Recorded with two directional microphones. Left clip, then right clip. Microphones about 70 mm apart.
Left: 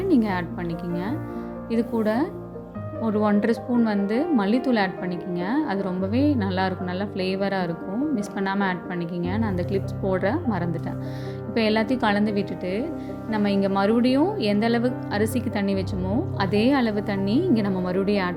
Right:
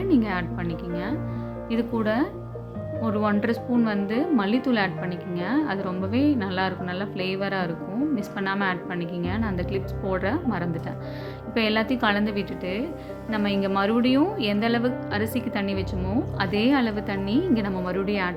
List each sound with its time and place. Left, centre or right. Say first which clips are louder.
0.1 s speech: even; left
2.0 s a woman's voice: right 1 dB; left